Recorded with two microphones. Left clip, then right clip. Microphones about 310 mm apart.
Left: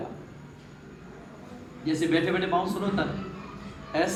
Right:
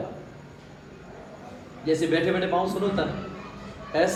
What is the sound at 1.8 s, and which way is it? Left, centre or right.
Speech, centre.